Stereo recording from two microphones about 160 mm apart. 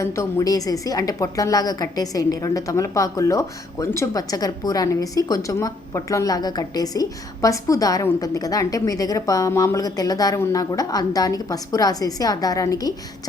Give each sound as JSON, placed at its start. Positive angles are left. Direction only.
{"t": 0.0, "sound": "a woman's voice", "side_deg": 15}